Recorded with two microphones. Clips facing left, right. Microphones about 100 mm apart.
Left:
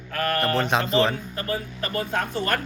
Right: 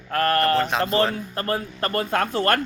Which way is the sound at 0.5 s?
Centre (ahead or behind).